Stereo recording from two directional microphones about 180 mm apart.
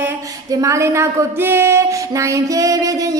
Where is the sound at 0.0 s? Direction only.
15° right (ahead or behind).